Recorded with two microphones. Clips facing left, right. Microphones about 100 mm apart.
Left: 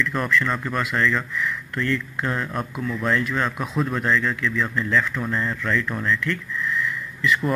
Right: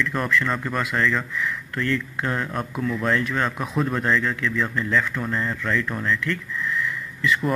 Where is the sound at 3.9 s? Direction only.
30° right (ahead or behind).